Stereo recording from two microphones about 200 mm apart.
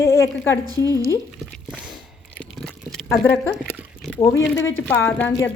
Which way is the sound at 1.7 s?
5° right (ahead or behind).